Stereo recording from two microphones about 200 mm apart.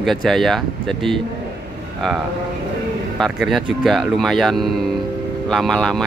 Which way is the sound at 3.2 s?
Centre (ahead or behind).